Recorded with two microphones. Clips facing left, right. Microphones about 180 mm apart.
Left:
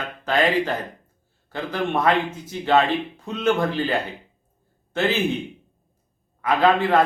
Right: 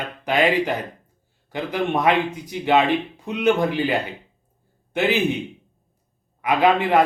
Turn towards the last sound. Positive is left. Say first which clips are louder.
# right 1 dB
turn(degrees=-15)  # may be behind; listen again after turning